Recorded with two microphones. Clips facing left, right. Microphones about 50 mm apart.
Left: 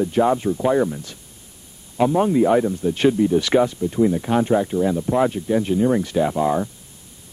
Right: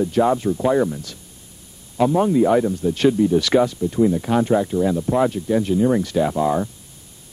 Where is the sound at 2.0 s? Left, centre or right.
Centre.